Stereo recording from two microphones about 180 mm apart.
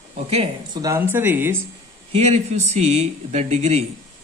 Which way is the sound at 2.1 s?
35° right (ahead or behind).